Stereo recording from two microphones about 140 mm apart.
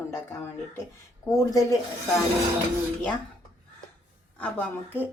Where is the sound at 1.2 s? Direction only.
25° left (ahead or behind).